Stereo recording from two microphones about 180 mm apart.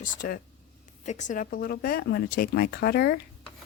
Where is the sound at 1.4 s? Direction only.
60° left (ahead or behind).